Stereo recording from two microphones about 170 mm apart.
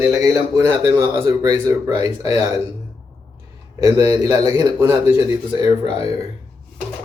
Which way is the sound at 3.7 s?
15° right (ahead or behind).